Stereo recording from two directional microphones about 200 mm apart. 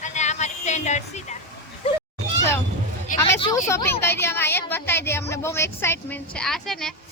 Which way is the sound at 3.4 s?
25° left (ahead or behind).